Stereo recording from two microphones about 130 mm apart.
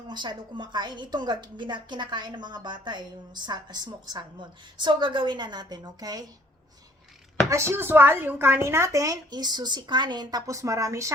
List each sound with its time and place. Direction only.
0.1 s a woman's voice: 35° right (ahead or behind)
7.5 s a woman's voice: 20° right (ahead or behind)